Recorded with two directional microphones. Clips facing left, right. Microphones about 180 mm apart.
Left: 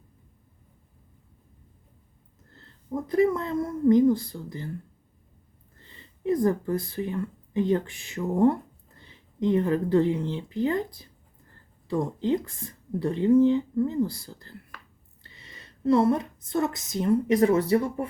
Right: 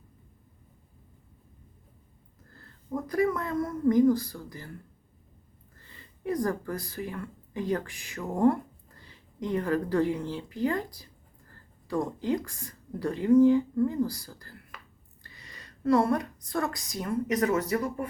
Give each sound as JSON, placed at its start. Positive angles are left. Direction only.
{"t": 2.5, "sound": "a woman's voice", "side_deg": 25}
{"t": 5.8, "sound": "a woman's voice", "side_deg": 20}